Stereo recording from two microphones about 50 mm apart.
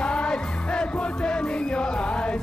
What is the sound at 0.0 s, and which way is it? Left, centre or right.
Music, left.